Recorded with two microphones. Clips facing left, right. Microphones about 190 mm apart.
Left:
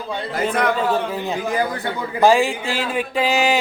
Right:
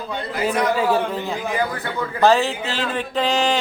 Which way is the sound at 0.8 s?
10° right (ahead or behind).